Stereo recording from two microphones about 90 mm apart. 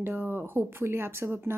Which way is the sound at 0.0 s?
20° right (ahead or behind).